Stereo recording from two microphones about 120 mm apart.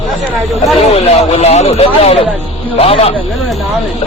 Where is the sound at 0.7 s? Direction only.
60° left (ahead or behind).